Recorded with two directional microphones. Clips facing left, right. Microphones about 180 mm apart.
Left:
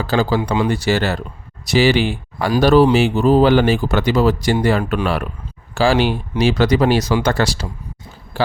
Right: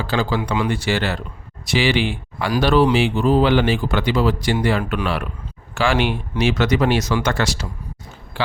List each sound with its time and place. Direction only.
0.0 s speech: 40° left (ahead or behind)